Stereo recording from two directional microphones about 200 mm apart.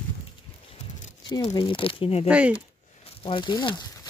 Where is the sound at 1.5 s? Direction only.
25° left (ahead or behind).